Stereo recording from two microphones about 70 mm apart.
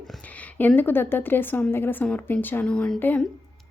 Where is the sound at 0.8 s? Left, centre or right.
Left.